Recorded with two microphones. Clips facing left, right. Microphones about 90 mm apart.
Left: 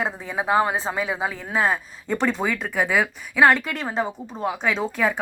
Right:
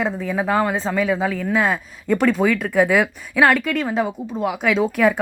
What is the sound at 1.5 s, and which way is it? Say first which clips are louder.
Speech: right 3 dB; 35° left (ahead or behind).